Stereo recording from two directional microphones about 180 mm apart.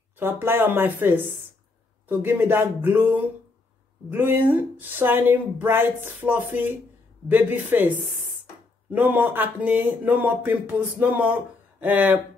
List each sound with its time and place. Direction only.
0.2 s speech: 10° right (ahead or behind)